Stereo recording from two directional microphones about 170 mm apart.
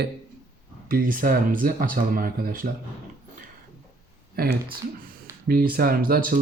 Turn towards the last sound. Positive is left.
turn(degrees=-60)  # may be behind; listen again after turning